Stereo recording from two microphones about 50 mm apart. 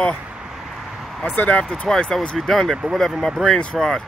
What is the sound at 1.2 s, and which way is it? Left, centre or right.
Speech, left.